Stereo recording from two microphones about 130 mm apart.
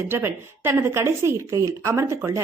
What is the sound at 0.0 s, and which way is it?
A woman's voice, 20° right (ahead or behind).